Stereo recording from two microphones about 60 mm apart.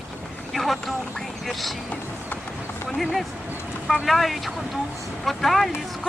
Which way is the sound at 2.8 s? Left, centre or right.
Centre.